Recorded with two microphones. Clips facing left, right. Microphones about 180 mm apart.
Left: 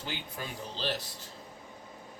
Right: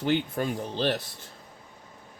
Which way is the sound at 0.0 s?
55° right (ahead or behind).